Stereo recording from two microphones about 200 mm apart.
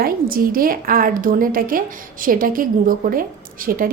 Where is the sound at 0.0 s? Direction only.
45° right (ahead or behind).